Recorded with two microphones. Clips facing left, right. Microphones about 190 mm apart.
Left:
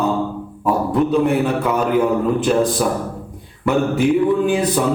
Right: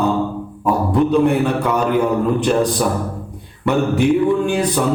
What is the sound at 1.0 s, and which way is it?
Music, 5° left (ahead or behind).